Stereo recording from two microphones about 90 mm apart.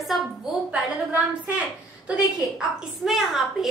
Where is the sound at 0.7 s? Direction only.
15° right (ahead or behind).